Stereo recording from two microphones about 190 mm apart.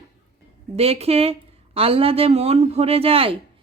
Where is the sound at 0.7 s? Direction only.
30° right (ahead or behind).